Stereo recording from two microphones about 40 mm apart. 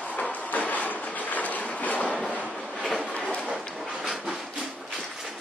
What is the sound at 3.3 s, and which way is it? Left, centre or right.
Train, left.